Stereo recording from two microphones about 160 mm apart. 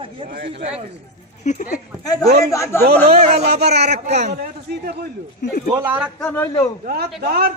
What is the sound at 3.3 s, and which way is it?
Speech, 90° right.